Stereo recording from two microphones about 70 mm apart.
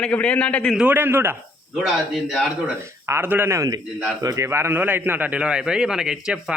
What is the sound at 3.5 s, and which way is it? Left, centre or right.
A man's voice, right.